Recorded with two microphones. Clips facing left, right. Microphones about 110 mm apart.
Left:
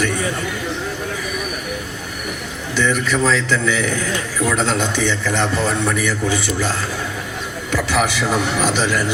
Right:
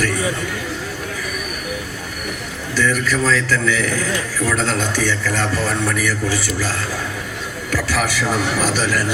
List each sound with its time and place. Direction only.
2.7 s a man's voice: 20° left (ahead or behind)